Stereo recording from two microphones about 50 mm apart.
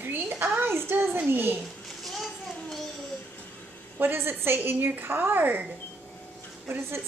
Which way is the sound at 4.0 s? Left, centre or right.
Right.